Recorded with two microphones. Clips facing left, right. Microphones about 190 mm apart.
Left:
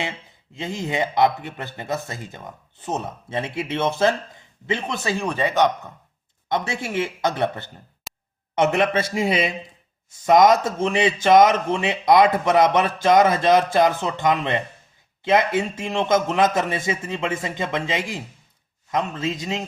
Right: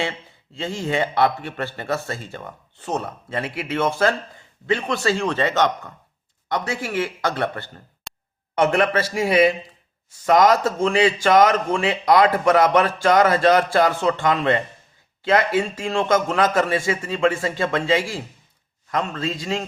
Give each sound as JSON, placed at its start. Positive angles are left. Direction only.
{"t": 0.5, "sound": "a man's voice", "side_deg": 20}
{"t": 6.5, "sound": "a man's voice", "side_deg": 25}
{"t": 8.1, "sound": "a sound", "side_deg": 5}
{"t": 8.5, "sound": "a man's voice", "side_deg": 20}